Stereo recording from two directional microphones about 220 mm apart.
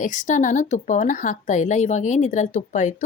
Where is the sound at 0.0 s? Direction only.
35° left (ahead or behind).